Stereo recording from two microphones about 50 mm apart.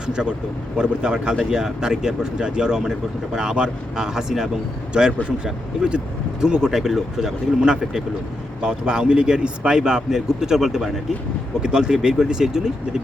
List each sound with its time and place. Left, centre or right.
0.1 s speech: centre
11.6 s speech: centre